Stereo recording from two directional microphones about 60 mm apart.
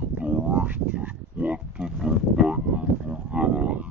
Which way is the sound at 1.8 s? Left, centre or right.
Centre.